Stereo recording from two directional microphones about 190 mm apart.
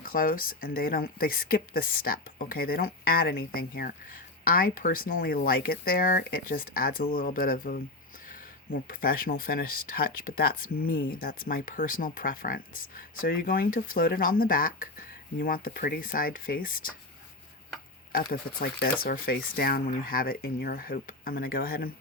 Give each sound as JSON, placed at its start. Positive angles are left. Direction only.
{"t": 0.0, "sound": "speech", "side_deg": 50}
{"t": 18.1, "sound": "speech", "side_deg": 50}